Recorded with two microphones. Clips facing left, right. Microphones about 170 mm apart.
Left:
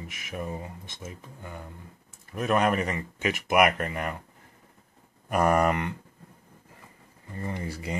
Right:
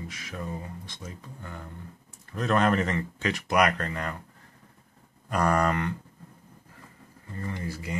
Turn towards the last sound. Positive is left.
turn(degrees=25)  # may be behind; listen again after turning